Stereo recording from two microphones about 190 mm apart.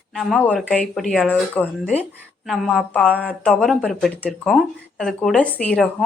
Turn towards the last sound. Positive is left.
turn(degrees=5)  # may be behind; listen again after turning